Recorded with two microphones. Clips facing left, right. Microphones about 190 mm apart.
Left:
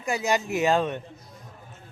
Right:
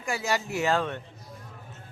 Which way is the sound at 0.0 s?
20° left (ahead or behind).